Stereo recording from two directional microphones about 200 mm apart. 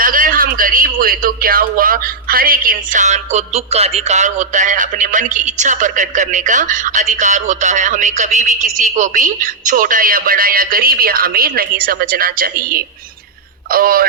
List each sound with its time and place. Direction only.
0.0 s a man's voice: 45° right (ahead or behind)